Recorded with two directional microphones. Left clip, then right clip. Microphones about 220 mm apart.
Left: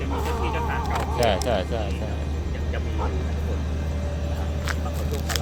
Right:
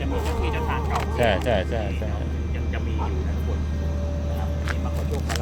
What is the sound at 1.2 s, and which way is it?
Speech, centre (ahead or behind).